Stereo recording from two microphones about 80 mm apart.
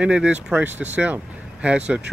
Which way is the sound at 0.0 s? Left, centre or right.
Centre.